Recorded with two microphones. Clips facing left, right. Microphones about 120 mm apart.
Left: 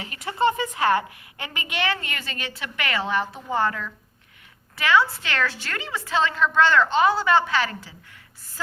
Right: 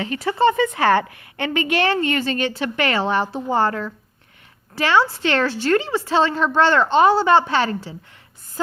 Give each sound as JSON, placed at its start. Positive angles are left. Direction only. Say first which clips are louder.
{"t": 0.0, "sound": "a woman's voice", "louder": "right 5 dB", "side_deg": -30}
{"t": 0.8, "sound": "a woman's voice", "louder": "right 4 dB", "side_deg": -75}
{"t": 1.9, "sound": "a woman's voice", "louder": "right 10 dB", "side_deg": -30}